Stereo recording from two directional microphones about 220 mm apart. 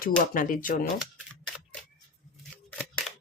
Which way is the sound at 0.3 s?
40° left (ahead or behind).